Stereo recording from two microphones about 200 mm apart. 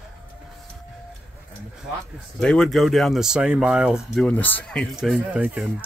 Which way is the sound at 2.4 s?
5° left (ahead or behind).